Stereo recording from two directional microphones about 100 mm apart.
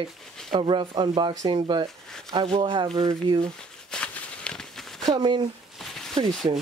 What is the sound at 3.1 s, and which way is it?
Speech, 45° right (ahead or behind).